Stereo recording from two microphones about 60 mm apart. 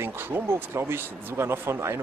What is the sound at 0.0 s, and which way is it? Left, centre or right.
A man's voice, right.